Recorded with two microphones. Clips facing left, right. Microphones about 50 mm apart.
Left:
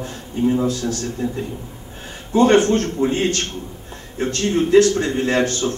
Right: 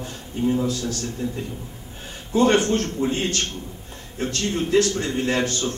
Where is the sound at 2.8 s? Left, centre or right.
Centre.